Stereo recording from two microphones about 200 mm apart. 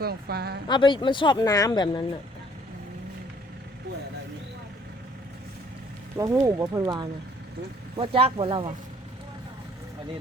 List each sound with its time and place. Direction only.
0.0 s a woman's voice: 50° right (ahead or behind)
0.7 s speech: 25° left (ahead or behind)
6.1 s speech: 15° right (ahead or behind)